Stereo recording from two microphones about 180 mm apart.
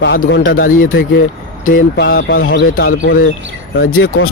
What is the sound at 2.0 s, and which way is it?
Speech, 70° left (ahead or behind).